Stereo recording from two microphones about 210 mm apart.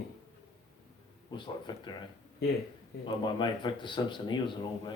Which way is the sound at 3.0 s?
20° left (ahead or behind).